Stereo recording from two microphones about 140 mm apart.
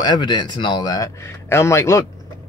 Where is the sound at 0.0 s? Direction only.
30° left (ahead or behind).